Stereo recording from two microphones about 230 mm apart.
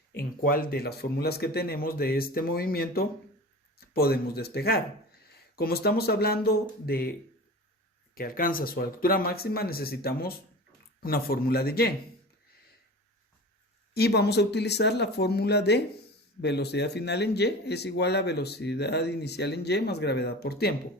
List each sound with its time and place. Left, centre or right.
0.2 s speech: left
8.1 s speech: left
13.9 s speech: left